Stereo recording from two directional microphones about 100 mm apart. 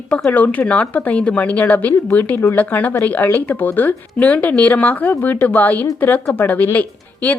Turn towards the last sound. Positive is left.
turn(degrees=15)  # may be behind; listen again after turning